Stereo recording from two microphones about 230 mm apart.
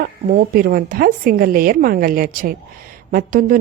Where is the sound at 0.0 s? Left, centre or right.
Right.